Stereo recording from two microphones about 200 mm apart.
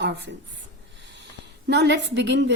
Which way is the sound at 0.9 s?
60° right (ahead or behind).